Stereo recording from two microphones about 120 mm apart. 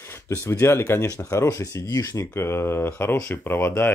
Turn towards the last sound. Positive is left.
turn(degrees=15)  # may be behind; listen again after turning